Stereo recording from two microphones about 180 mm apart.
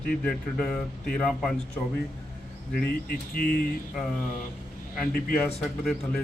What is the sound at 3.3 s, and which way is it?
Speech, 55° left (ahead or behind).